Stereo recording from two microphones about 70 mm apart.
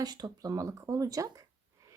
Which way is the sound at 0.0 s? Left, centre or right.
Right.